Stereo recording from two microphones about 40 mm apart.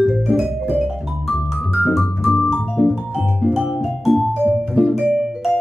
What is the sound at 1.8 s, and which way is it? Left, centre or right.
Music, centre.